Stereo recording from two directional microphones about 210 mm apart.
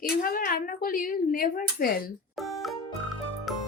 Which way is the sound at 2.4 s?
Centre (ahead or behind).